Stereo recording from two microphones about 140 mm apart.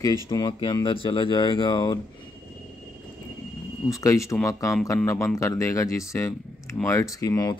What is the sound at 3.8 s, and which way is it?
Speech, 20° left (ahead or behind).